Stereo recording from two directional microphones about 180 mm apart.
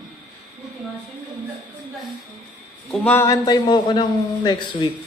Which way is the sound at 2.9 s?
10° left (ahead or behind).